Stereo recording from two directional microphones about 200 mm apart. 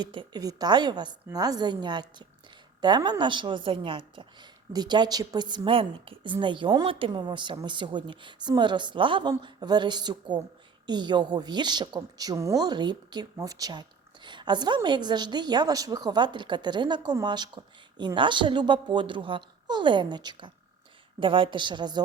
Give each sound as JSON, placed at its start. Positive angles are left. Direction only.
{"t": 0.0, "sound": "a woman's voice", "side_deg": -25}